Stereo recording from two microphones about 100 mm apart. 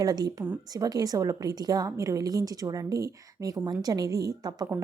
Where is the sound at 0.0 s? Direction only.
40° right (ahead or behind).